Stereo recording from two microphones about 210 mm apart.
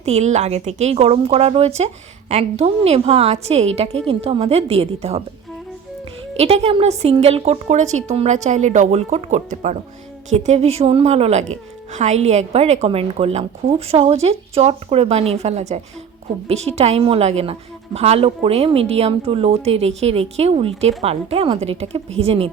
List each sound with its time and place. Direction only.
0.0 s a woman's voice: 30° right (ahead or behind)
6.3 s a woman's voice: 30° right (ahead or behind)